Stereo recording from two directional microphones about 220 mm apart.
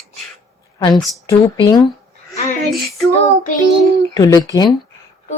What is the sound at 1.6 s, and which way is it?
Speech, 20° left (ahead or behind).